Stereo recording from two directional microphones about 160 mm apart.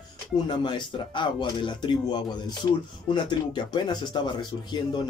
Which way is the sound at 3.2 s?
30° left (ahead or behind).